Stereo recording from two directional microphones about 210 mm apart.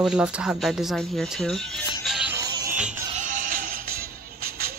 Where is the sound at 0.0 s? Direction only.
5° right (ahead or behind).